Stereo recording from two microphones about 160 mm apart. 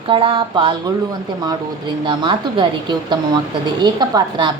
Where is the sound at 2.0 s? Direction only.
30° right (ahead or behind).